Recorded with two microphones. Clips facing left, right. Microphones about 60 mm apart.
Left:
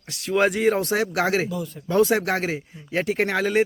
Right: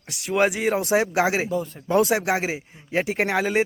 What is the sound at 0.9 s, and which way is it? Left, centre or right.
Speech, centre.